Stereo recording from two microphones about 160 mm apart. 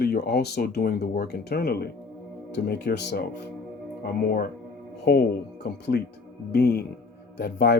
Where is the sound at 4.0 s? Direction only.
70° left (ahead or behind).